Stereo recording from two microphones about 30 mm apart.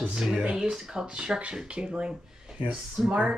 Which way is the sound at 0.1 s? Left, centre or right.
Right.